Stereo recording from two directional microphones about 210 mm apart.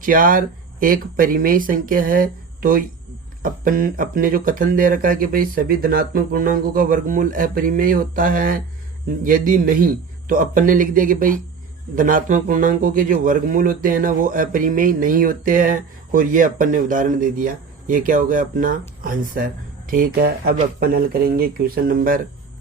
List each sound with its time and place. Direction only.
0.0 s a man's voice: 40° right (ahead or behind)